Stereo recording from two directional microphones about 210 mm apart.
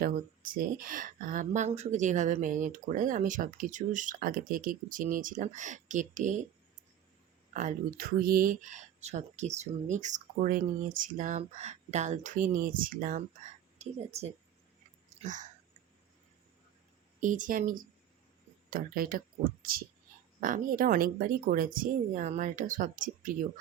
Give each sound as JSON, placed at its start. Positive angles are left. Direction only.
{"t": 0.0, "sound": "speech", "side_deg": -45}
{"t": 7.5, "sound": "a woman's voice", "side_deg": -40}
{"t": 15.2, "sound": "whispering", "side_deg": -35}
{"t": 17.2, "sound": "speech", "side_deg": -40}
{"t": 20.4, "sound": "speech", "side_deg": -40}